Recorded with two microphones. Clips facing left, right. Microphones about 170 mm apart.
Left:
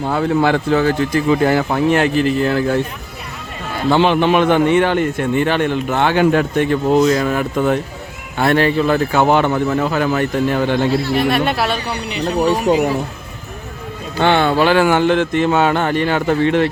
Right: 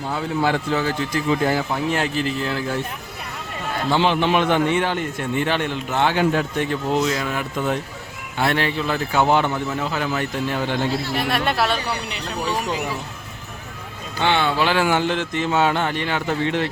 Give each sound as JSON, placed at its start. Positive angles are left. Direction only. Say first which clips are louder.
{"t": 0.0, "sound": "a man's voice", "louder": "left 7 dB", "side_deg": 60}
{"t": 3.8, "sound": "a man's voice", "louder": "left 6 dB", "side_deg": 55}
{"t": 7.0, "sound": "speech", "louder": "left 8 dB", "side_deg": 45}
{"t": 8.4, "sound": "a man's voice", "louder": "left 7 dB", "side_deg": 45}
{"t": 11.2, "sound": "speech", "louder": "left 5 dB", "side_deg": 0}
{"t": 12.2, "sound": "speech", "louder": "left 12 dB", "side_deg": 50}
{"t": 14.2, "sound": "a man's voice", "louder": "left 6 dB", "side_deg": 50}